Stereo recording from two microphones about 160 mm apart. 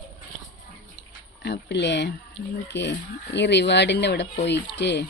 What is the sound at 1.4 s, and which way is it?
Speech, 90° left.